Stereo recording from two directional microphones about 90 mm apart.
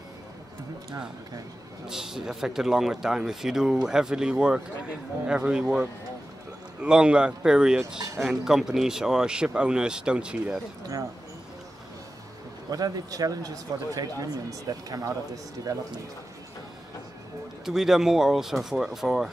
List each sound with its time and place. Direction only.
1.9 s a man's voice: 5° right (ahead or behind)
12.6 s speech: 45° right (ahead or behind)
17.6 s speech: 5° right (ahead or behind)